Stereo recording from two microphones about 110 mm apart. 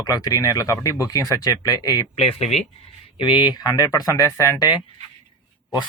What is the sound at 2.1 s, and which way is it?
Speech, 75° left (ahead or behind).